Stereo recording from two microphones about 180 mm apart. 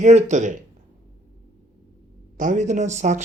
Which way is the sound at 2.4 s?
45° right (ahead or behind).